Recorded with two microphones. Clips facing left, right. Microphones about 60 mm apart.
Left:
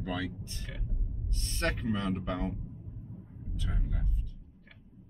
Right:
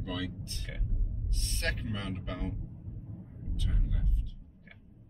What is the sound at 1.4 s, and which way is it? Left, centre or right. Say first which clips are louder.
Speech: left 3 dB; left.